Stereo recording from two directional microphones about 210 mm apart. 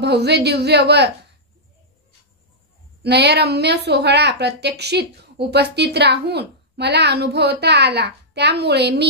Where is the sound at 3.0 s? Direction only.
50° right (ahead or behind).